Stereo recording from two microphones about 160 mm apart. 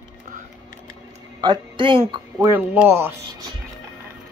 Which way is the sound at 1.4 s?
30° right (ahead or behind).